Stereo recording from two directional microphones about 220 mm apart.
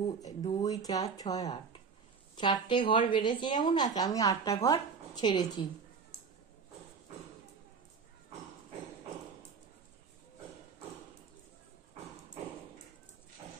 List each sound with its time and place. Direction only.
0.2 s a woman's voice: 15° left (ahead or behind)